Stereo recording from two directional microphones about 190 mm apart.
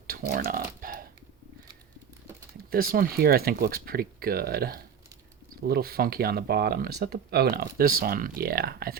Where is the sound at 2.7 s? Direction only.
50° right (ahead or behind).